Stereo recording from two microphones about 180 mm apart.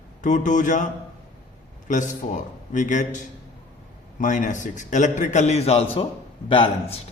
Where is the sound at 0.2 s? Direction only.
45° left (ahead or behind).